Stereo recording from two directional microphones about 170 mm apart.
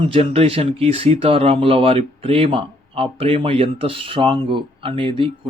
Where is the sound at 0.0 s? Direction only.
35° right (ahead or behind).